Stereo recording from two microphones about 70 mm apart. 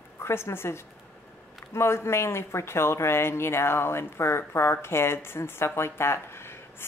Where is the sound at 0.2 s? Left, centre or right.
Left.